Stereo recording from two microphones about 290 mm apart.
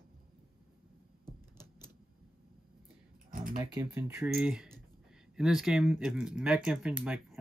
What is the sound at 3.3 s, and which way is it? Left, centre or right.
Typing, right.